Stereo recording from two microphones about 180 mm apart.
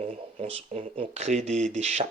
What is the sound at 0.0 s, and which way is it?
Speech, 35° right (ahead or behind).